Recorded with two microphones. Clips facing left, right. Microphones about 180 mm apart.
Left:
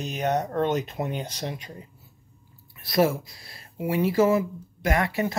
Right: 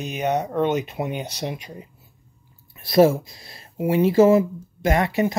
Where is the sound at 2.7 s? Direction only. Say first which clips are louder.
Right 6 dB; 25° right (ahead or behind).